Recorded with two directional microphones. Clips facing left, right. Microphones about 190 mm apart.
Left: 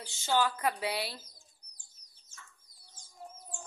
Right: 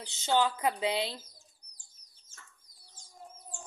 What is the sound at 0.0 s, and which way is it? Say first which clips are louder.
A woman's voice: right 2 dB; 20° right (ahead or behind).